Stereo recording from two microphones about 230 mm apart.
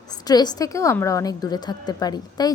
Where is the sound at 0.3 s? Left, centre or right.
Centre.